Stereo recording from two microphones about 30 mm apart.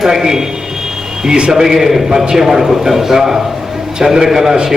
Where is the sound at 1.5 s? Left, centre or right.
Centre.